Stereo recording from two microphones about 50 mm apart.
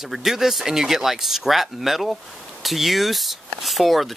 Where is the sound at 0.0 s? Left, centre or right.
Centre.